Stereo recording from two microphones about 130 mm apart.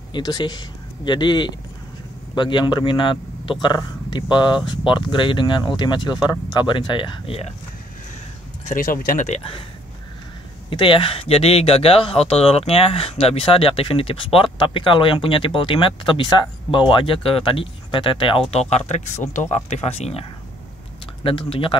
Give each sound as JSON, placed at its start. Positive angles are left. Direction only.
{"t": 0.1, "sound": "speech", "side_deg": 35}
{"t": 8.6, "sound": "speech", "side_deg": 90}
{"t": 9.4, "sound": "speech", "side_deg": 45}
{"t": 10.7, "sound": "speech", "side_deg": 40}